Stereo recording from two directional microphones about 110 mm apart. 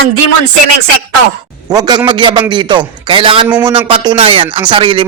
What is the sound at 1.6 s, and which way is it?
A man's voice, 35° right (ahead or behind).